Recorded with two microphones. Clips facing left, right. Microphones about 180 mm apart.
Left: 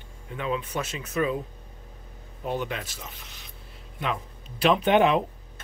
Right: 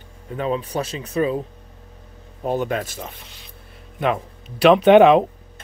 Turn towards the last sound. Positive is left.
turn(degrees=-80)